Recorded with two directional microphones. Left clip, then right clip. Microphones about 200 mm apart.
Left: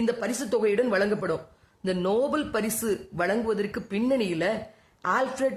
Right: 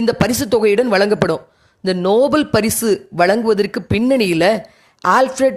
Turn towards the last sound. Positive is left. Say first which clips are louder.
# right 12 dB
turn(degrees=-40)  # may be behind; listen again after turning